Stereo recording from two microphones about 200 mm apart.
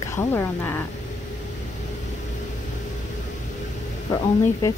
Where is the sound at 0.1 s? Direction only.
10° left (ahead or behind).